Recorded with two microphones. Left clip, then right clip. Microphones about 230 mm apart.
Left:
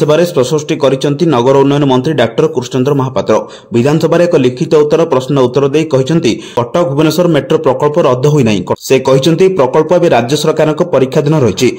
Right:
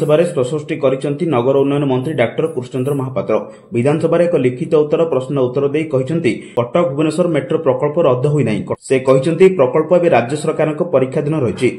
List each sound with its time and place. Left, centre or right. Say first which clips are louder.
0.1 s a man's voice: left 4 dB; left